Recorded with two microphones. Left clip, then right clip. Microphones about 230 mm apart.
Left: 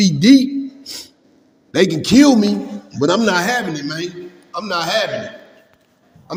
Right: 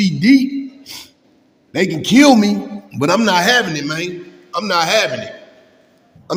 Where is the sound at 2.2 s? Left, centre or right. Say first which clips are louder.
Right 3 dB; right.